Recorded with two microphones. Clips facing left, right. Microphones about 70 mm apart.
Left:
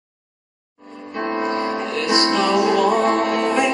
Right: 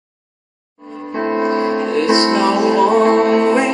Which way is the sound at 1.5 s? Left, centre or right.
Right.